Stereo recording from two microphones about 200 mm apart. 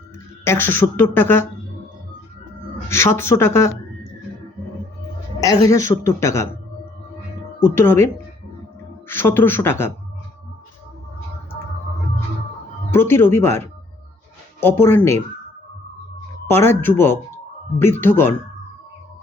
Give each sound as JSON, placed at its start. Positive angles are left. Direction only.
{"t": 0.4, "sound": "speech", "side_deg": 10}
{"t": 2.9, "sound": "speech", "side_deg": 15}
{"t": 5.4, "sound": "a woman's voice", "side_deg": 15}
{"t": 7.6, "sound": "speech", "side_deg": 15}
{"t": 12.9, "sound": "speech", "side_deg": 10}
{"t": 16.5, "sound": "speech", "side_deg": 10}